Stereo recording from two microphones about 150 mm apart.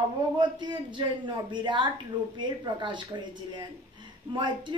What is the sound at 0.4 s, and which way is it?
A woman's voice, 30° right (ahead or behind).